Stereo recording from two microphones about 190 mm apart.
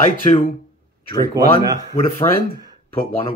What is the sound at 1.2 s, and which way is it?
Speech, 20° right (ahead or behind).